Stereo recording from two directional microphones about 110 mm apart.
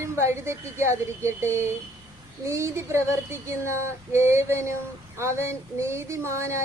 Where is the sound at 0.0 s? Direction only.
25° right (ahead or behind).